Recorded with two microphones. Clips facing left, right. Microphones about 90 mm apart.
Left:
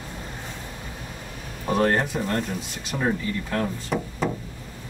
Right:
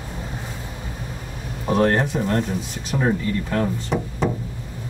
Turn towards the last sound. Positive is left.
turn(degrees=-5)  # may be behind; listen again after turning